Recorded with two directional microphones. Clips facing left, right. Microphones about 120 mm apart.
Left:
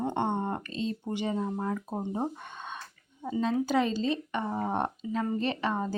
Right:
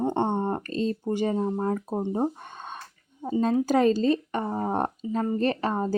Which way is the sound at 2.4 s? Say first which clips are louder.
Right 2 dB; 40° right (ahead or behind).